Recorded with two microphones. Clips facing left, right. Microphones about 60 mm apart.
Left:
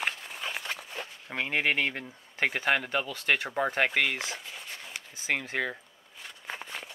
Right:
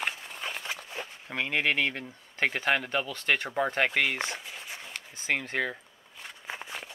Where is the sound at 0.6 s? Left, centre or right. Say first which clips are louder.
Even; centre.